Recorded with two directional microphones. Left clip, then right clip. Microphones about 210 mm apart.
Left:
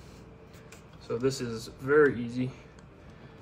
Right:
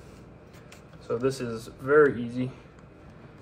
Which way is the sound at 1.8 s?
25° left (ahead or behind).